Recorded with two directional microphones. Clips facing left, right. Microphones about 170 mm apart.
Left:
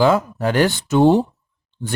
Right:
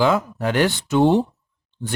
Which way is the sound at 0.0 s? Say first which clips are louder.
Left 3 dB; 40° left (ahead or behind).